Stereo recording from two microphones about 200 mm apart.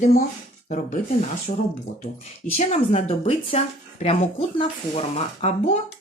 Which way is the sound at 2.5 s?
35° left (ahead or behind).